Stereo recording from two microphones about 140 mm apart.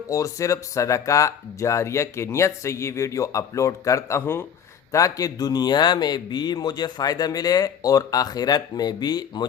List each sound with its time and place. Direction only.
0.1 s a man's voice: 25° left (ahead or behind)